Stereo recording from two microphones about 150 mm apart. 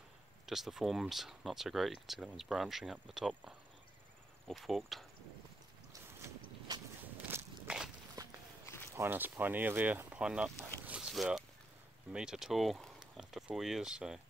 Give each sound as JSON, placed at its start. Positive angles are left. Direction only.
{"t": 0.5, "sound": "speech", "side_deg": 0}
{"t": 7.2, "sound": "walk", "side_deg": -10}
{"t": 8.2, "sound": "walk", "side_deg": -25}
{"t": 8.6, "sound": "walk", "side_deg": 15}
{"t": 8.9, "sound": "speech", "side_deg": -15}